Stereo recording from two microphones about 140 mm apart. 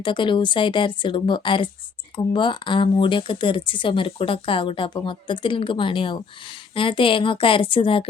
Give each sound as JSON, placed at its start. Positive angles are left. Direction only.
{"t": 0.0, "sound": "speech", "side_deg": 35}